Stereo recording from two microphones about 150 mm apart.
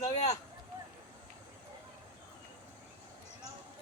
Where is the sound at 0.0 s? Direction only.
50° left (ahead or behind).